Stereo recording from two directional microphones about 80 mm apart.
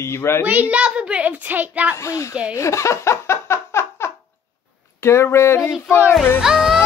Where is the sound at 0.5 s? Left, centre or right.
Centre.